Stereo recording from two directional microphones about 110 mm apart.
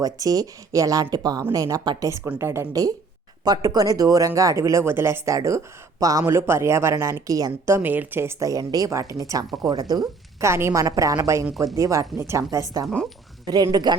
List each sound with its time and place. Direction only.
0.0 s speech: 35° right (ahead or behind)
2.0 s a woman's voice: 25° right (ahead or behind)
13.5 s speech: 40° right (ahead or behind)